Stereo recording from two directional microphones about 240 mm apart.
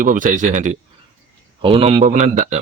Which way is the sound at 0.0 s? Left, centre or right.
Right.